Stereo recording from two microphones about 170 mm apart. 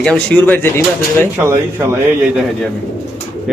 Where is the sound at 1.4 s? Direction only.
15° right (ahead or behind).